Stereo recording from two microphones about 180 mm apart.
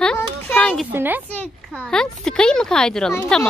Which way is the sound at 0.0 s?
5° left (ahead or behind).